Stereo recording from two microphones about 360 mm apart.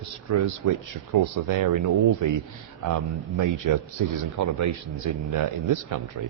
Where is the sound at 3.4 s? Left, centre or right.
Right.